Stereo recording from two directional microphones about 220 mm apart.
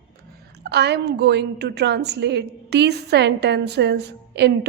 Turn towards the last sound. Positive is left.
turn(degrees=-50)  # may be behind; listen again after turning